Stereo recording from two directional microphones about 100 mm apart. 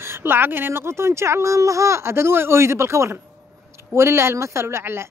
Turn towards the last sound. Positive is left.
turn(degrees=-25)  # may be behind; listen again after turning